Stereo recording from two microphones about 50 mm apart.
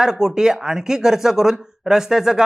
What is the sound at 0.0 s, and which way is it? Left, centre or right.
Speech, centre.